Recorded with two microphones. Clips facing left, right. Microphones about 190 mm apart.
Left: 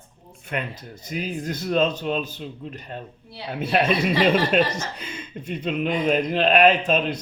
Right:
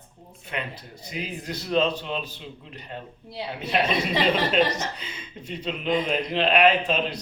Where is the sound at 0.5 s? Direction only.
50° left (ahead or behind).